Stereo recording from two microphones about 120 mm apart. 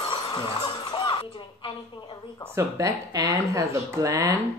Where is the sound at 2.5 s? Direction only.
20° right (ahead or behind).